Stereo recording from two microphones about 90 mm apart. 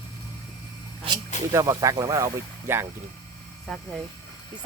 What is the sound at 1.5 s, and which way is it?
Speech, 40° right (ahead or behind).